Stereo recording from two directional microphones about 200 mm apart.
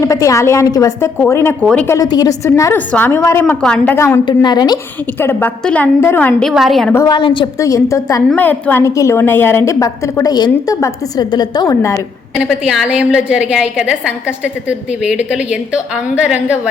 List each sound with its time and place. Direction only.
0.0 s a woman's voice: 15° left (ahead or behind)
5.2 s a woman's voice: 10° left (ahead or behind)
6.9 s a woman's voice: 20° left (ahead or behind)
12.5 s a woman's voice: 5° right (ahead or behind)